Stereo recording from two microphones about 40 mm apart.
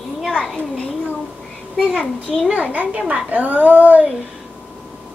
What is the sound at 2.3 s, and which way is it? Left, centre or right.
Speech, centre.